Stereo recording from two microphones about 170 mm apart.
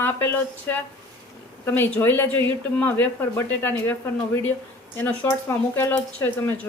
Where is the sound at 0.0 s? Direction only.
10° left (ahead or behind).